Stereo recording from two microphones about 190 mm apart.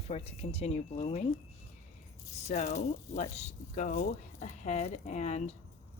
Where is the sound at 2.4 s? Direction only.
40° left (ahead or behind).